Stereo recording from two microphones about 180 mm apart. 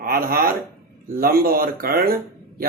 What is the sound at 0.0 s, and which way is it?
A man's voice, 55° right (ahead or behind).